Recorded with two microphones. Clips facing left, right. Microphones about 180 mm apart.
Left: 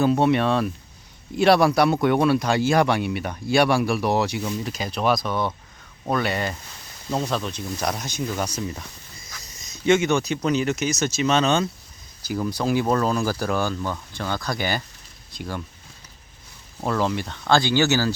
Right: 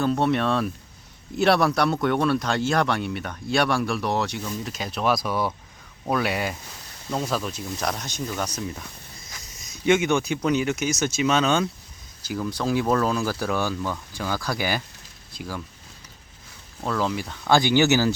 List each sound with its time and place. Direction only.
0.0 s speech: 5° left (ahead or behind)
9.5 s speech: 10° right (ahead or behind)
12.4 s speech: 5° left (ahead or behind)
16.8 s speech: centre (ahead or behind)
17.5 s speech: 15° right (ahead or behind)